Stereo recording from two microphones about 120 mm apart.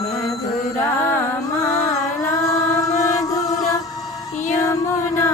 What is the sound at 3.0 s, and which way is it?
Music, 30° left (ahead or behind).